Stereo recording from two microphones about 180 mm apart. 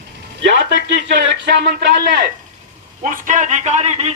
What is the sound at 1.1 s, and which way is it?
Speech, 75° right (ahead or behind).